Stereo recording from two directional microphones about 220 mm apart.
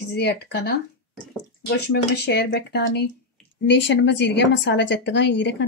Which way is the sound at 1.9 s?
50° left (ahead or behind).